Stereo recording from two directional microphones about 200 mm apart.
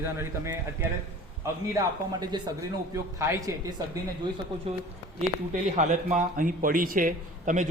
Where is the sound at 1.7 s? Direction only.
20° right (ahead or behind).